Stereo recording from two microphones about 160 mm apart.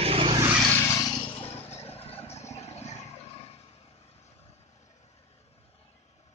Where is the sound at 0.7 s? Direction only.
15° left (ahead or behind).